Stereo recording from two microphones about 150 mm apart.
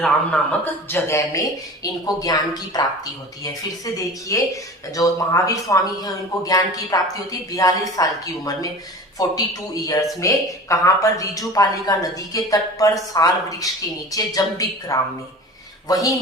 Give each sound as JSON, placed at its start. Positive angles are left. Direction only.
{"t": 0.0, "sound": "a man's voice", "side_deg": 10}